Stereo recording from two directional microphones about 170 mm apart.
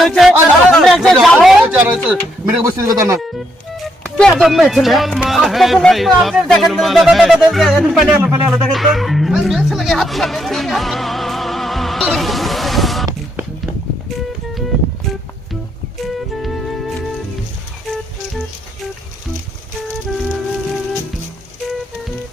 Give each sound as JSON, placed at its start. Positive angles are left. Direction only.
{"t": 0.0, "sound": "speech", "side_deg": 0}
{"t": 4.0, "sound": "speech", "side_deg": 5}
{"t": 8.1, "sound": "speech", "side_deg": -15}
{"t": 8.7, "sound": "speech", "side_deg": 0}